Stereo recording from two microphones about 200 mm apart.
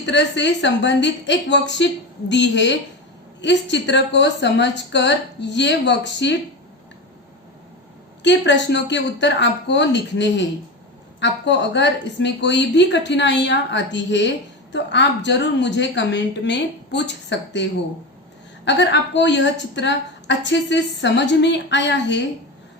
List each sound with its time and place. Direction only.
0.0 s a woman's voice: 60° left (ahead or behind)
8.2 s a woman's voice: 60° left (ahead or behind)